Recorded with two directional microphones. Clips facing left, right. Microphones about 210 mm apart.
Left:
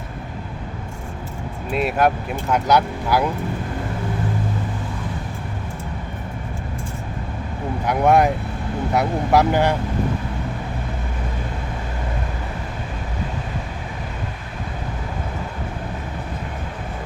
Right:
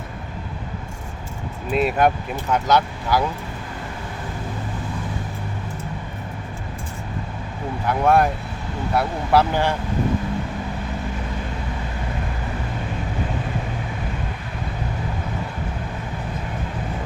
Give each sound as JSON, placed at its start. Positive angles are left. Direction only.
{"t": 1.7, "sound": "speech", "side_deg": 0}
{"t": 7.9, "sound": "speech", "side_deg": 15}